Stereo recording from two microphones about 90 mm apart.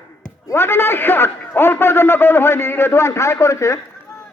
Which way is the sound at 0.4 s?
25° left (ahead or behind).